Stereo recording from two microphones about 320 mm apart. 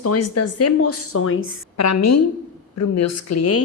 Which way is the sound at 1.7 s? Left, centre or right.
Left.